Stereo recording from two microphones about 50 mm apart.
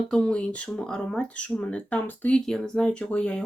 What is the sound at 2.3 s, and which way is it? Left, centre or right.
Speech, centre.